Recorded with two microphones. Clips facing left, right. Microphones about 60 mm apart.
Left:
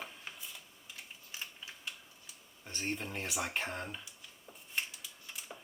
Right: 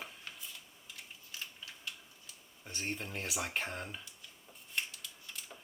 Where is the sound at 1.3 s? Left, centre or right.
Left.